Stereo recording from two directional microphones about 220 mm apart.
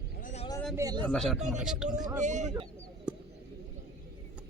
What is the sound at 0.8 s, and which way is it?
Speech, 15° right (ahead or behind).